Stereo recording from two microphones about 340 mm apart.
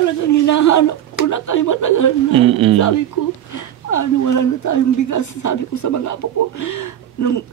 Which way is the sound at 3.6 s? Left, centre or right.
Left.